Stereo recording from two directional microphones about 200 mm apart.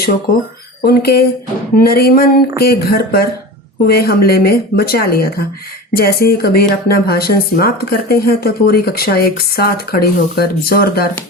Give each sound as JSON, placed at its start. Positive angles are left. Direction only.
{"t": 0.8, "sound": "speech", "side_deg": 50}